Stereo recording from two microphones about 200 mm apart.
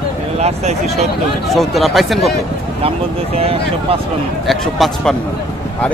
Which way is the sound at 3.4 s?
30° right (ahead or behind).